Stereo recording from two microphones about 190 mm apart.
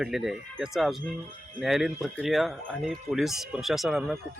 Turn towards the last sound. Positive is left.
turn(degrees=0)  # may be behind; listen again after turning